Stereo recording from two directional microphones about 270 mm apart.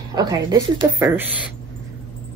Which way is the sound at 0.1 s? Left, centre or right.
Centre.